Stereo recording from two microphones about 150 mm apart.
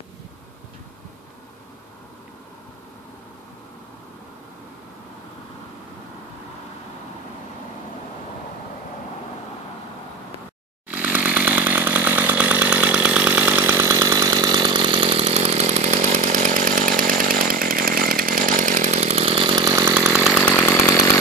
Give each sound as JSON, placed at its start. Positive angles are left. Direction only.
{"t": 10.9, "sound": "chainsaw", "side_deg": -10}
{"t": 19.7, "sound": "chainsaw", "side_deg": -15}
{"t": 20.0, "sound": "chainsaw", "side_deg": -5}
{"t": 20.4, "sound": "chainsaw", "side_deg": 15}